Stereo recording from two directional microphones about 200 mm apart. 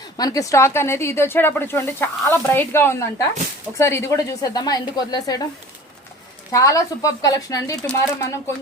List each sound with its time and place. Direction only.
0.2 s speech: 20° left (ahead or behind)
6.5 s speech: 15° left (ahead or behind)